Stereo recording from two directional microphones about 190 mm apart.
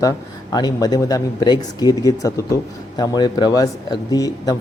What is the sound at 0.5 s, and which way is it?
A man's voice, 20° left (ahead or behind).